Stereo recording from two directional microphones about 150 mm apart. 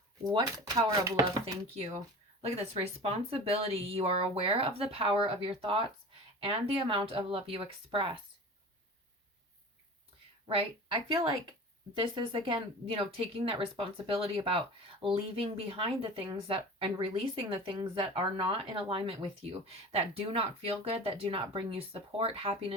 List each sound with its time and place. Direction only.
0.3 s speech: 25° right (ahead or behind)
2.4 s speech: 40° right (ahead or behind)
10.4 s a woman's voice: 35° right (ahead or behind)
12.1 s speech: 35° right (ahead or behind)